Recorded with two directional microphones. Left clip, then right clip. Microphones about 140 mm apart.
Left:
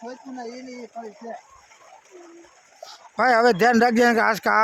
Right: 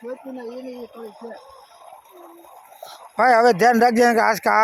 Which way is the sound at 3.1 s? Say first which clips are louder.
Right 3 dB; 10° left (ahead or behind).